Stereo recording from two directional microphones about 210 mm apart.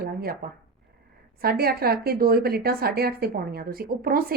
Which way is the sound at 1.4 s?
45° right (ahead or behind).